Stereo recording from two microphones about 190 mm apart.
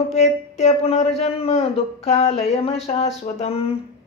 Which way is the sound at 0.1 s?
35° left (ahead or behind).